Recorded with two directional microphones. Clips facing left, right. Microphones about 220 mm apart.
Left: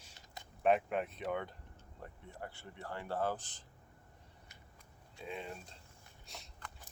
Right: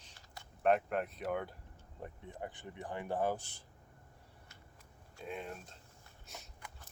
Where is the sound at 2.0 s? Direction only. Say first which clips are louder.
Right 3 dB; 20° right (ahead or behind).